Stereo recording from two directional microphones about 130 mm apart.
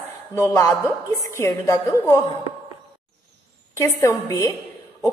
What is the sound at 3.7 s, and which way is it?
Speech, 20° left (ahead or behind).